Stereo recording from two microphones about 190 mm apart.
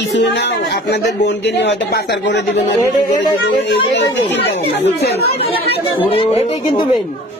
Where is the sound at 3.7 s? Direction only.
70° left (ahead or behind).